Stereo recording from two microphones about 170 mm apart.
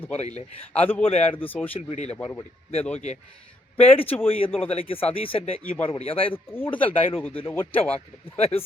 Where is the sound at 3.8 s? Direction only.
35° left (ahead or behind).